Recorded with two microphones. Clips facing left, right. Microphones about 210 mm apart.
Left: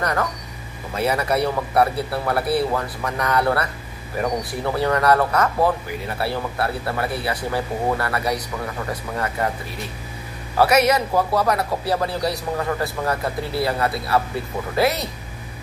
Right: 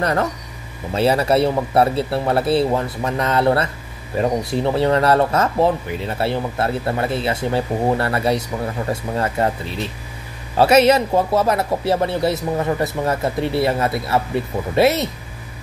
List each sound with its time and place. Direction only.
0.0 s a man's voice: 25° right (ahead or behind)